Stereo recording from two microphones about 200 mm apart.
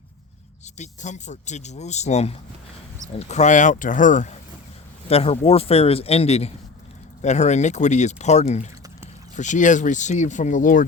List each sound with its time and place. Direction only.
0.8 s speech: 35° left (ahead or behind)